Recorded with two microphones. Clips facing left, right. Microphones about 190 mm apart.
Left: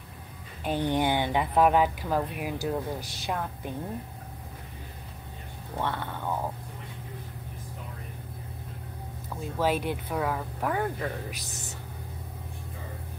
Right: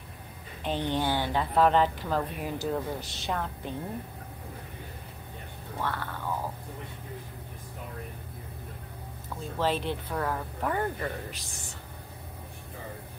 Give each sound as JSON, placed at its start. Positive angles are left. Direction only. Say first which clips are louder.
{"t": 0.7, "sound": "speech", "louder": "left 3 dB", "side_deg": 10}
{"t": 5.8, "sound": "a sound", "louder": "left 2 dB", "side_deg": 20}
{"t": 9.6, "sound": "speech", "louder": "left 2 dB", "side_deg": 10}